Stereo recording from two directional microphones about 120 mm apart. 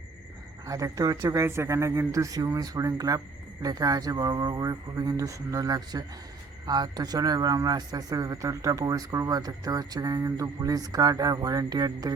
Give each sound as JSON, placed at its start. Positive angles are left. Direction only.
{"t": 0.7, "sound": "a man's voice", "side_deg": -30}